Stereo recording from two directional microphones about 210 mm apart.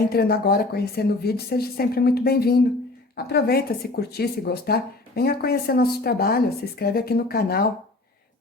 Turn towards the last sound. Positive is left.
turn(degrees=45)  # may be behind; listen again after turning